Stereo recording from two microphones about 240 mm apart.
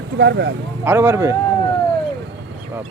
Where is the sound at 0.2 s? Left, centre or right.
Right.